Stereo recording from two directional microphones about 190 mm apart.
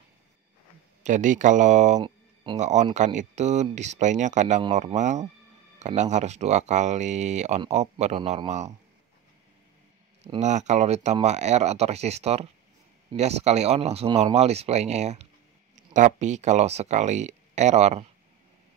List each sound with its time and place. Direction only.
1.0 s speech: 40° right (ahead or behind)
2.0 s a sound: 25° right (ahead or behind)
2.6 s speech: 40° right (ahead or behind)
10.2 s speech: 40° right (ahead or behind)